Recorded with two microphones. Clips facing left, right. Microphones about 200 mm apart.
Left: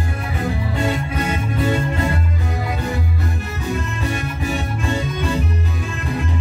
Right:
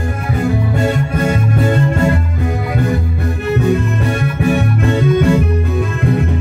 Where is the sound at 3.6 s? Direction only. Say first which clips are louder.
Right 4 dB; 60° right (ahead or behind).